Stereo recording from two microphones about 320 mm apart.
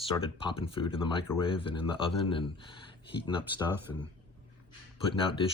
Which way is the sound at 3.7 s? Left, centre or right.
Centre.